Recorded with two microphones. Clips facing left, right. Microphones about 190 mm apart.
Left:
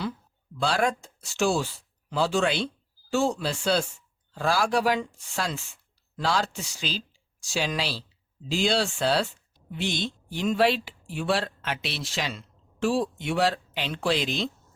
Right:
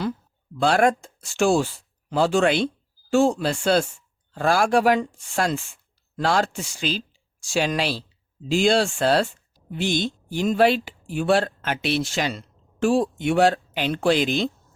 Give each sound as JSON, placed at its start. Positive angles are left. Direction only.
{"t": 0.6, "sound": "speech", "side_deg": -55}